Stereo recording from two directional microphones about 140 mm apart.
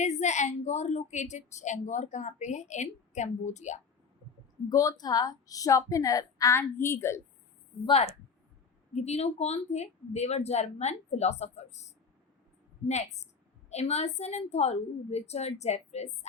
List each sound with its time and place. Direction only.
0.0 s a woman's voice: 55° left (ahead or behind)
4.7 s a woman's voice: 25° left (ahead or behind)
9.0 s a woman's voice: 50° left (ahead or behind)